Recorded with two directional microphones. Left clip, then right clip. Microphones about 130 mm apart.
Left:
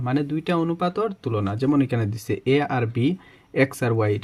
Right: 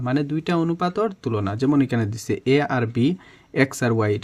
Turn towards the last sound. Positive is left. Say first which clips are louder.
# right 1 dB
turn(degrees=-20)  # may be behind; listen again after turning